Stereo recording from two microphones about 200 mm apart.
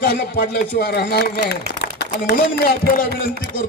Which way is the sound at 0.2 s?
50° left (ahead or behind).